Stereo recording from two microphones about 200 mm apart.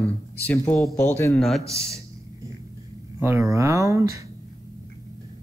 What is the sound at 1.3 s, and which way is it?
Speech, centre (ahead or behind).